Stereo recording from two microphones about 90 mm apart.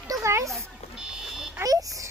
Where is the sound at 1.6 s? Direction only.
40° right (ahead or behind).